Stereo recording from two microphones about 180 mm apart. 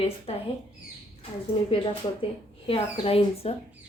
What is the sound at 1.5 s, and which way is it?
Speech, 25° left (ahead or behind).